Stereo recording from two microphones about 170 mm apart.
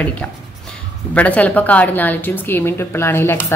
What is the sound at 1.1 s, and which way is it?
A woman's voice, 10° left (ahead or behind).